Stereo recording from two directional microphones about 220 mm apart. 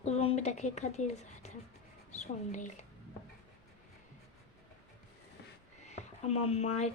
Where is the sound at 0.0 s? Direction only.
30° left (ahead or behind).